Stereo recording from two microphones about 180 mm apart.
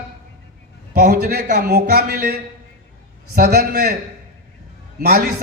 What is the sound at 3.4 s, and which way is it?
Speech, 60° right (ahead or behind).